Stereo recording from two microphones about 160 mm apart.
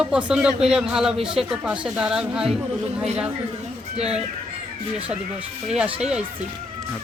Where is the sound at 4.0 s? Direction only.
40° right (ahead or behind).